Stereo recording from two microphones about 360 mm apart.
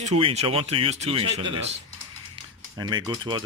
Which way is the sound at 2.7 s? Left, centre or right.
Centre.